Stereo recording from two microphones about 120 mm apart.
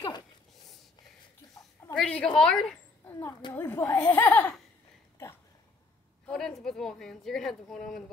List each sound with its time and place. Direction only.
2.0 s a woman's voice: 10° left (ahead or behind)
3.2 s speech: 30° left (ahead or behind)
3.5 s speech: 20° left (ahead or behind)
6.2 s a woman's voice: 5° left (ahead or behind)